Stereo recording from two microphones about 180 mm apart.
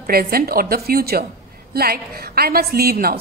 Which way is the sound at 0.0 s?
55° right (ahead or behind).